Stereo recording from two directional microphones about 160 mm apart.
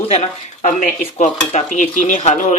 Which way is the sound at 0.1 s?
50° left (ahead or behind).